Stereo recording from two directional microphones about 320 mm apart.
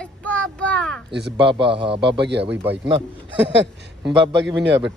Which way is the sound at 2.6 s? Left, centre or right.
Centre.